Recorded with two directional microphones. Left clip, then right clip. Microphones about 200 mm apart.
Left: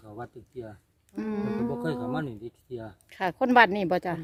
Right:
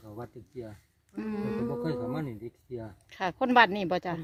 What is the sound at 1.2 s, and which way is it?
Speech, 20° left (ahead or behind).